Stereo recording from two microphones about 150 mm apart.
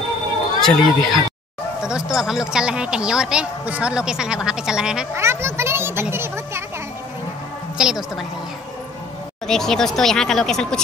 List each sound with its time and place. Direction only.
0.6 s speech: centre (ahead or behind)
1.8 s a sound: 5° right (ahead or behind)
2.1 s speech: 5° right (ahead or behind)
5.1 s children playing: 15° right (ahead or behind)
7.7 s a woman's voice: 5° right (ahead or behind)
9.5 s speech: 5° left (ahead or behind)